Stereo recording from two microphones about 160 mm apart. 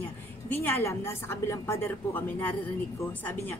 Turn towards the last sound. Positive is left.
turn(degrees=10)  # may be behind; listen again after turning